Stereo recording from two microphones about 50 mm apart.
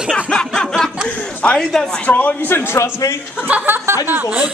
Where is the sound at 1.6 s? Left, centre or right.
Centre.